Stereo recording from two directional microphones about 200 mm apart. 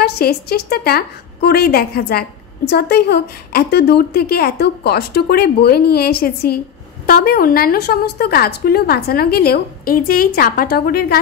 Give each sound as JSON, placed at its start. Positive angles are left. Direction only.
{"t": 0.0, "sound": "a woman's voice", "side_deg": 50}